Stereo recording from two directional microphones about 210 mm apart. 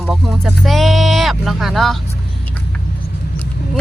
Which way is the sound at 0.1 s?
Centre (ahead or behind).